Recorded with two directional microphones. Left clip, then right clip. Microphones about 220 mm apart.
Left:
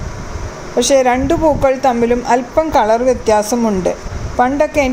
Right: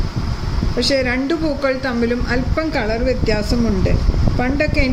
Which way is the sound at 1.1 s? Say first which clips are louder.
Left 7 dB; centre (ahead or behind).